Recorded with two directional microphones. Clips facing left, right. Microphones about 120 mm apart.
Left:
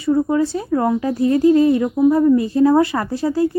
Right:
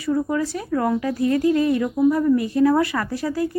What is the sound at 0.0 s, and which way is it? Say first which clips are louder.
Speech: left 5 dB; 25° left (ahead or behind).